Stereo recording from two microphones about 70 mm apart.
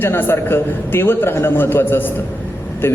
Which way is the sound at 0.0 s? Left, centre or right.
Left.